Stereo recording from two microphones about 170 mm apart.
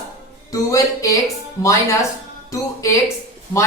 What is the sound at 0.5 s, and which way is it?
Speech, 20° left (ahead or behind).